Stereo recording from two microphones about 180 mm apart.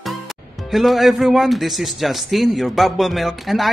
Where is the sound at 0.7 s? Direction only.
Centre (ahead or behind).